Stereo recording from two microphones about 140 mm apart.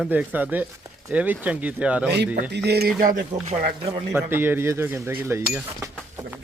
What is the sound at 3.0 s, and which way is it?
Speech, 75° right (ahead or behind).